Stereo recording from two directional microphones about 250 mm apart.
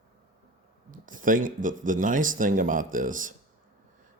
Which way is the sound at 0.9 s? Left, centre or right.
Right.